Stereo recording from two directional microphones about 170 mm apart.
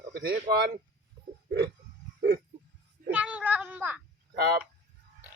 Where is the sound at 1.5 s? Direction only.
75° right (ahead or behind).